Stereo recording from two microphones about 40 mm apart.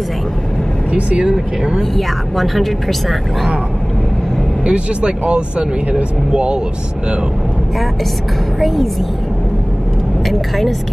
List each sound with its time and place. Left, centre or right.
0.9 s speech: right
1.3 s speech: centre
2.0 s speech: centre
4.6 s speech: right
8.5 s speech: centre
10.2 s speech: centre